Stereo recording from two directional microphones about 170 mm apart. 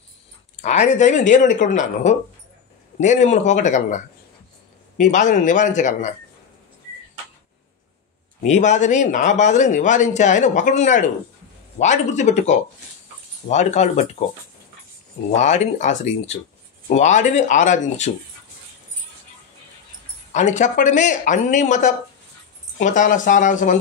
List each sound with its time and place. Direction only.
0.6 s speech: 40° left (ahead or behind)
8.4 s speech: 45° left (ahead or behind)
15.3 s speech: 40° left (ahead or behind)
20.3 s speech: 45° left (ahead or behind)